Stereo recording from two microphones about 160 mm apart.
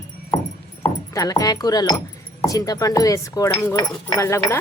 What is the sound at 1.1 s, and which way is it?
A woman's voice, 20° left (ahead or behind).